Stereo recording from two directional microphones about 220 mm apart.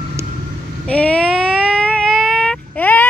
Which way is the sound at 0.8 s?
5° left (ahead or behind).